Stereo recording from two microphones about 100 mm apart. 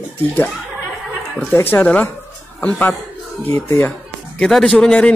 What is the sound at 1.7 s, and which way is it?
Speech, 15° left (ahead or behind).